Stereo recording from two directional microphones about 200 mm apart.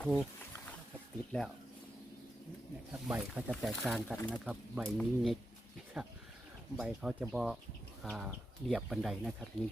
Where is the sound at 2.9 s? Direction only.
10° right (ahead or behind).